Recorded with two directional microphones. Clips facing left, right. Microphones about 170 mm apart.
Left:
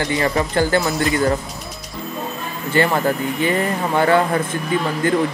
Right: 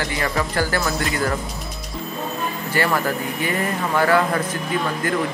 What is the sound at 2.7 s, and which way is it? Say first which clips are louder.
Speech: left 4 dB; 25° left (ahead or behind).